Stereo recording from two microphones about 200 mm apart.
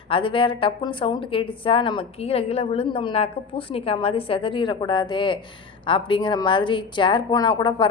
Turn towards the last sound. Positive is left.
turn(degrees=20)  # may be behind; listen again after turning